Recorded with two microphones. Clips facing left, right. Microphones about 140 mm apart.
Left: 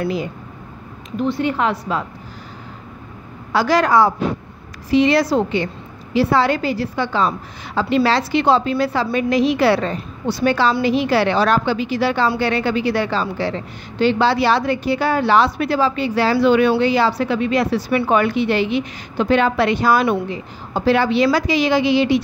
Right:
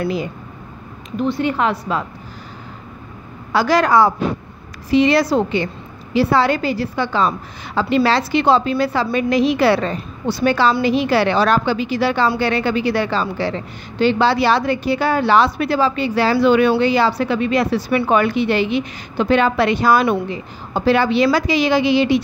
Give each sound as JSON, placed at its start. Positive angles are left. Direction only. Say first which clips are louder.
{"t": 1.4, "sound": "a woman's voice", "louder": "right 1 dB", "side_deg": -60}
{"t": 3.5, "sound": "a woman's voice", "louder": "right 1 dB", "side_deg": -80}
{"t": 12.3, "sound": "a woman's voice", "louder": "right 1 dB", "side_deg": -70}